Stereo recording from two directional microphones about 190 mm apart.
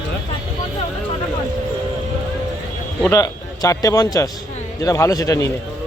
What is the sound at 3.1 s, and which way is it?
A man's voice, 15° left (ahead or behind).